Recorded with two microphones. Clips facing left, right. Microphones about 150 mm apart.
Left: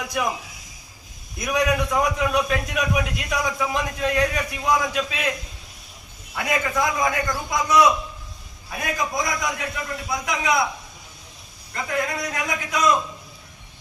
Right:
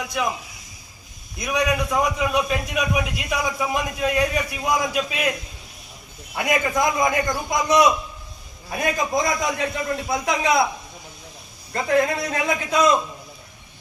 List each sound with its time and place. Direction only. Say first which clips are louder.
1.4 s a man's voice: left 1 dB; centre (ahead or behind); by 5.3 s 15° right (ahead or behind)
6.3 s a man's voice: right 2 dB; 20° right (ahead or behind)
11.7 s a man's voice: right 6 dB; 30° right (ahead or behind)